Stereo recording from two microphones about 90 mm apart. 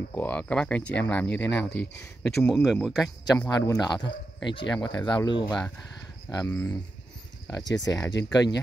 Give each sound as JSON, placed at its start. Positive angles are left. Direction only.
{"t": 0.1, "sound": "speech", "side_deg": 20}
{"t": 2.5, "sound": "speech", "side_deg": -5}
{"t": 3.4, "sound": "speech", "side_deg": 45}
{"t": 6.3, "sound": "speech", "side_deg": 35}